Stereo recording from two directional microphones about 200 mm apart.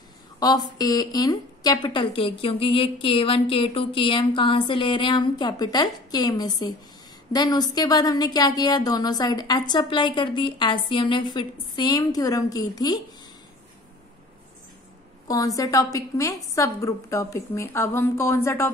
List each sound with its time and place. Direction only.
0.4 s a woman's voice: 20° left (ahead or behind)
15.2 s a woman's voice: 15° left (ahead or behind)